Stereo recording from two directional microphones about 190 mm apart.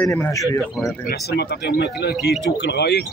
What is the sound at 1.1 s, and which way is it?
Speech, 60° left (ahead or behind).